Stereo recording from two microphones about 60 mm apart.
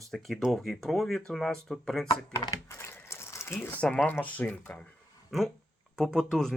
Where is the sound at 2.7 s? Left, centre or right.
Left.